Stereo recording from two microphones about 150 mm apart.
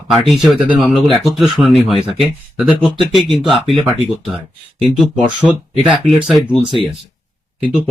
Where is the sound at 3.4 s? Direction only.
35° right (ahead or behind).